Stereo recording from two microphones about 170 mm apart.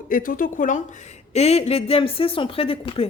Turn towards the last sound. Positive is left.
turn(degrees=35)  # may be behind; listen again after turning